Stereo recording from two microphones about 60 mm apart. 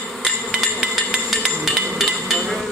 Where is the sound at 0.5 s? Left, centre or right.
Centre.